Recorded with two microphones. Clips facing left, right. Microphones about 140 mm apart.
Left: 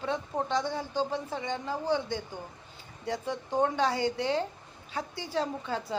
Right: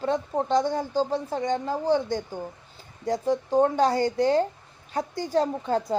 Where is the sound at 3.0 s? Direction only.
40° right (ahead or behind).